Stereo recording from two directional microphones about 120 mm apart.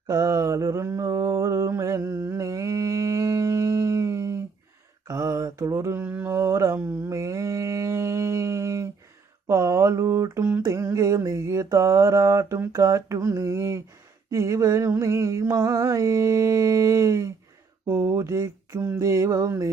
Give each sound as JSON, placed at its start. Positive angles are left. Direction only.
{"t": 0.1, "sound": "mantra", "side_deg": -30}